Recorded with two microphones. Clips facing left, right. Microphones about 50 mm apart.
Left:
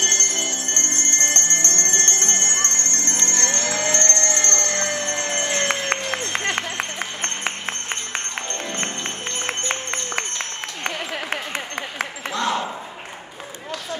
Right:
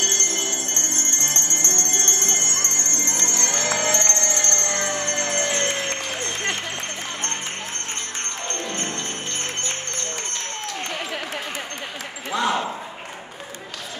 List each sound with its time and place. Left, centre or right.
0.0 s bell: left
3.5 s bell: centre
4.2 s bell: left
4.6 s music: centre
5.0 s music: left
5.7 s music: left
12.3 s a sound: centre